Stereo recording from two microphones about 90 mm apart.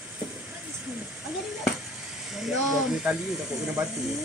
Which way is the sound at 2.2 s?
5° right (ahead or behind).